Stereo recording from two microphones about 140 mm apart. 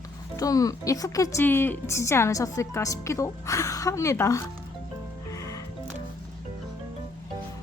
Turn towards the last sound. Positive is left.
turn(degrees=25)  # may be behind; listen again after turning